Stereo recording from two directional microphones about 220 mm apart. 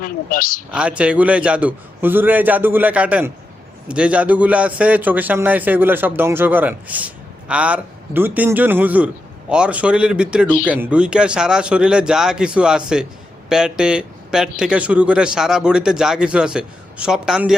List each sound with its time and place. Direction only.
0.0 s a woman's voice: 40° left (ahead or behind)
0.7 s a man's voice: 5° right (ahead or behind)